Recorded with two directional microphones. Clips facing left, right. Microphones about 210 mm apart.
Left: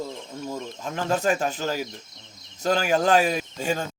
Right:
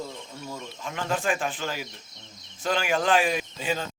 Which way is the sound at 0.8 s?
40° left (ahead or behind).